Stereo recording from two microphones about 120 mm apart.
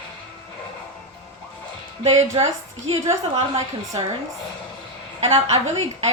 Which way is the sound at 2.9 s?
55° right (ahead or behind).